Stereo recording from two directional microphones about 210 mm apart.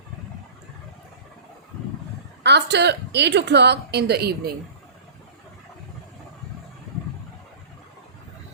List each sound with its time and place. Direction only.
2.4 s a woman's voice: 55° right (ahead or behind)